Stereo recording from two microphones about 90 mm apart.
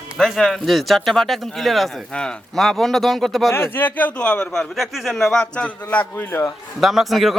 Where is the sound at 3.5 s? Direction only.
25° left (ahead or behind).